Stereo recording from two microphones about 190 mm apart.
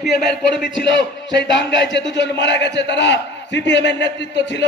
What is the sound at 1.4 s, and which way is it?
A man's voice, 65° left (ahead or behind).